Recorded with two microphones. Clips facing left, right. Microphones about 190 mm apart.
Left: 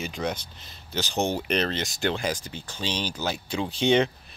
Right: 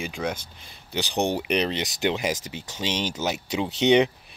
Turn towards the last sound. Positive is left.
turn(degrees=-20)  # may be behind; listen again after turning